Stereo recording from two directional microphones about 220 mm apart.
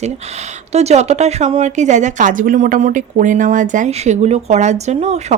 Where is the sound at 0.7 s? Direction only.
30° right (ahead or behind).